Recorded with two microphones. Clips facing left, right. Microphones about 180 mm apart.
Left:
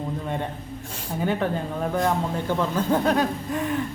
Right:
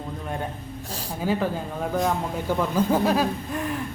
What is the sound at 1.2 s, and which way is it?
Speech, 5° right (ahead or behind).